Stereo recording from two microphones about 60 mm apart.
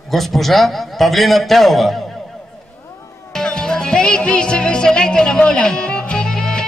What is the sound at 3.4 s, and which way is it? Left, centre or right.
Music, centre.